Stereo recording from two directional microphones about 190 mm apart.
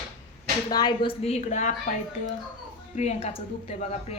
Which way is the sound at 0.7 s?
20° left (ahead or behind).